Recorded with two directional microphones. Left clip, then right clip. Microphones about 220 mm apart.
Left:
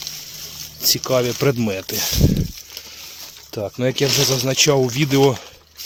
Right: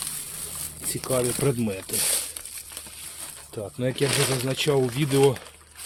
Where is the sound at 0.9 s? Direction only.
30° left (ahead or behind).